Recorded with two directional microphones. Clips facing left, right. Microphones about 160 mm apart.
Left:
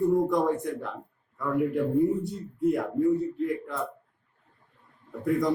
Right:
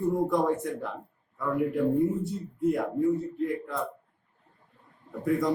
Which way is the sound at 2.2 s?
Centre (ahead or behind).